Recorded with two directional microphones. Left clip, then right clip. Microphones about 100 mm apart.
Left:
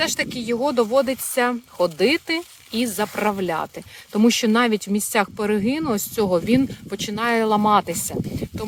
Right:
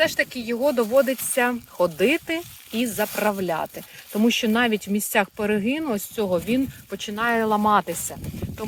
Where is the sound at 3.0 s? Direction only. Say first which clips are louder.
Even; 30° left (ahead or behind).